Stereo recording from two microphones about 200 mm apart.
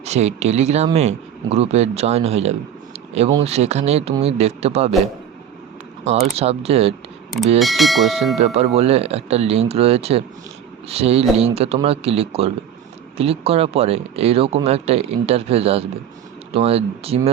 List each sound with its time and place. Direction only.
0.0 s speech: 35° right (ahead or behind)
6.1 s speech: 30° right (ahead or behind)
7.6 s speech: centre (ahead or behind)
8.4 s speech: 30° right (ahead or behind)